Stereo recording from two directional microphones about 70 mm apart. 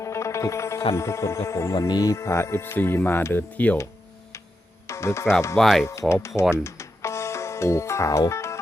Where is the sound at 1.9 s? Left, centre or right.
Left.